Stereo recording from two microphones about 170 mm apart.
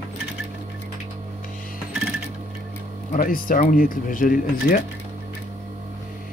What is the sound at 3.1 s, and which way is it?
Speech, 55° left (ahead or behind).